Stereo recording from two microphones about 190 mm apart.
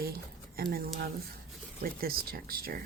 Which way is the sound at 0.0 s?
50° right (ahead or behind).